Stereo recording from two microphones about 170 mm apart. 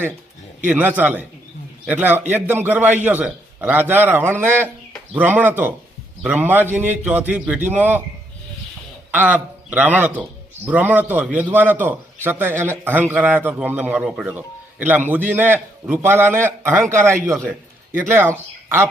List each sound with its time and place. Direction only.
0.7 s a man's voice: 10° right (ahead or behind)
9.1 s a man's voice: 10° right (ahead or behind)
17.9 s speech: 15° right (ahead or behind)